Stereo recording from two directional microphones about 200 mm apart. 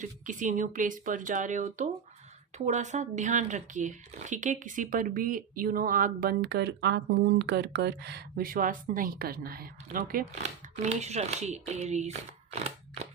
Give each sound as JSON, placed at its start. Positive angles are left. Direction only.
{"t": 0.0, "sound": "speech", "side_deg": -40}
{"t": 10.8, "sound": "speech", "side_deg": -35}